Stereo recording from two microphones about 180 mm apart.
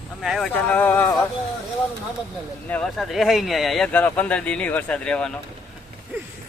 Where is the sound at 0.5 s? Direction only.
10° left (ahead or behind).